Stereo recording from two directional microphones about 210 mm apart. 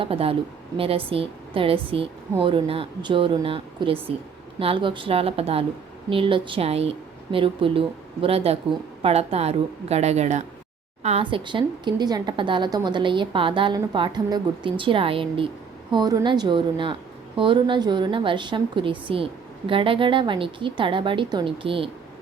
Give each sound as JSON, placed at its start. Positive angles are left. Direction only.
{"t": 0.0, "sound": "a woman's voice", "side_deg": -25}